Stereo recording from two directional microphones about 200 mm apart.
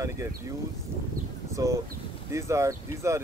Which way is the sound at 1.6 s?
15° right (ahead or behind).